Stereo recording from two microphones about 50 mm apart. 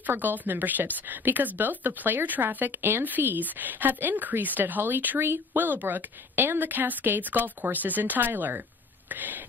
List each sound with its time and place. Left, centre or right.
0.0 s a woman's voice: right